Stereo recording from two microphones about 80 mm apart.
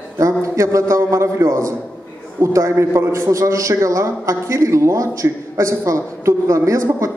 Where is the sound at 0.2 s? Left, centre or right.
Right.